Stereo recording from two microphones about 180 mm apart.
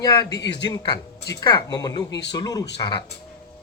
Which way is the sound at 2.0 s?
75° left (ahead or behind).